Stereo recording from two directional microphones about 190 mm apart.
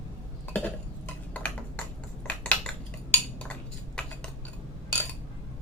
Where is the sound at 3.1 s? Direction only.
5° left (ahead or behind).